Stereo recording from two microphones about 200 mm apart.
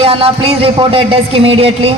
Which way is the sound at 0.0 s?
25° right (ahead or behind).